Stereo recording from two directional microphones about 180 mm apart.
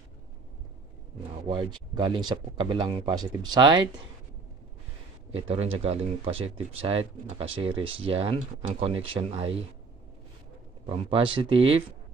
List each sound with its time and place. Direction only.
1.3 s speech: 25° right (ahead or behind)
5.3 s speech: 30° right (ahead or behind)
10.9 s speech: 30° right (ahead or behind)